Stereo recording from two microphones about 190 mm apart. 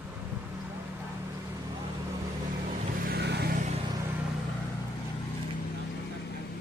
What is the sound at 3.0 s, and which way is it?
Vehicle, 60° right (ahead or behind).